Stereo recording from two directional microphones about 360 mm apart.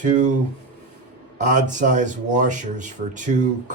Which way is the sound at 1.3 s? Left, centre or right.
Right.